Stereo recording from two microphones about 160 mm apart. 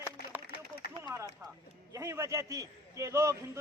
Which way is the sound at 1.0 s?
15° right (ahead or behind).